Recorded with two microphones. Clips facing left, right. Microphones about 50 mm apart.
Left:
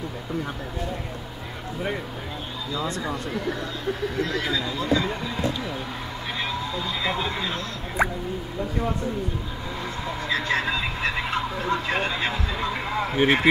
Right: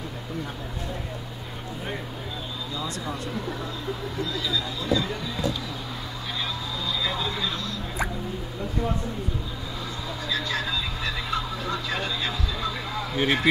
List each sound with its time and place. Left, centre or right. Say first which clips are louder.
2.9 s speech: left 3 dB; left
3.3 s speech: left 3 dB; left
10.3 s a sound: left 4 dB; left